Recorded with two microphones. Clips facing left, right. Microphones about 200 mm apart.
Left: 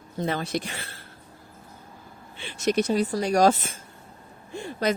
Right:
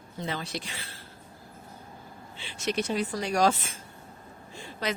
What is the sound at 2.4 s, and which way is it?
Speech, 50° left (ahead or behind).